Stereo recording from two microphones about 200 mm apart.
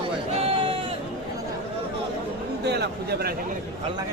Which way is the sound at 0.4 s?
30° right (ahead or behind).